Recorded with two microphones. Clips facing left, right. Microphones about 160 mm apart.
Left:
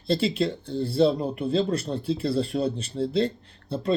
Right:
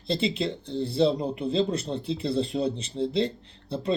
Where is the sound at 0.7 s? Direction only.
25° right (ahead or behind).